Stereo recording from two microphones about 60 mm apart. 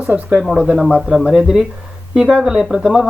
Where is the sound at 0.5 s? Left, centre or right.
Centre.